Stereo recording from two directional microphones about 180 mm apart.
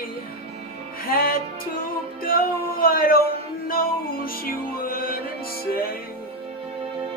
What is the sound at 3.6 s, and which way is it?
Music, 55° left (ahead or behind).